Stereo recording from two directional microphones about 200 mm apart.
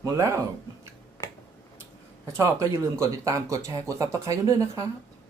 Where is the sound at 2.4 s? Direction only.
15° right (ahead or behind).